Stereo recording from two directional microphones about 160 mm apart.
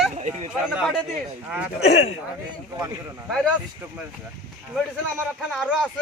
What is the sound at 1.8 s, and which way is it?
Speech, 40° left (ahead or behind).